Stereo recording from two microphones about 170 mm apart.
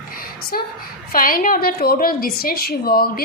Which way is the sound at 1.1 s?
55° left (ahead or behind).